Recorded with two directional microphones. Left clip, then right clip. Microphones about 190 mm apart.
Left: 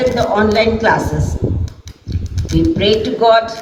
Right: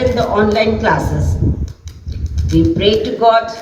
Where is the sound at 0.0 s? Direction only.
45° left (ahead or behind).